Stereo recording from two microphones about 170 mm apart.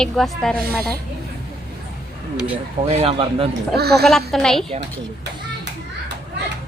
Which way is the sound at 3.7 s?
70° right (ahead or behind).